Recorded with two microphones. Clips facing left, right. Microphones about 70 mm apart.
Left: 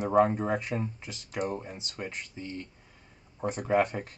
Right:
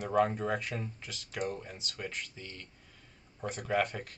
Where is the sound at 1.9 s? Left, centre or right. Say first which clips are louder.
Left 2 dB; left.